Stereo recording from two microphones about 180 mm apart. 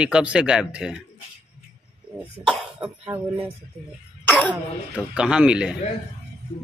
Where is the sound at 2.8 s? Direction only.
10° right (ahead or behind).